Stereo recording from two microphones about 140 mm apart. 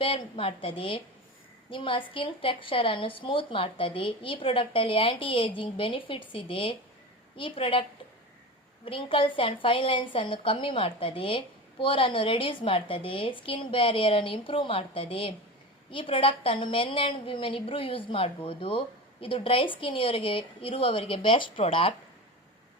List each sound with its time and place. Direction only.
0.0 s a woman's voice: 40° left (ahead or behind)